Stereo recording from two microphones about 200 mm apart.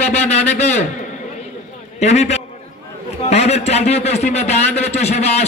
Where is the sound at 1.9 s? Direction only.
35° left (ahead or behind).